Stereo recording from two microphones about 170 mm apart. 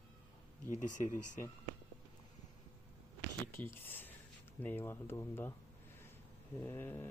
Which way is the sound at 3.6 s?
10° left (ahead or behind).